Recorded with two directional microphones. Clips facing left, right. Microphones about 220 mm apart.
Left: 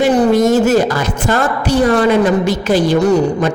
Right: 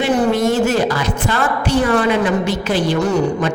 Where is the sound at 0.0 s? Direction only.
40° left (ahead or behind).